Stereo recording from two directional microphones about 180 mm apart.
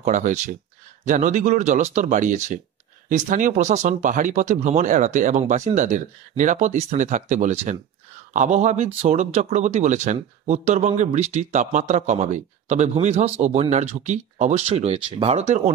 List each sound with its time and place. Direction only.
0.0 s speech: 45° right (ahead or behind)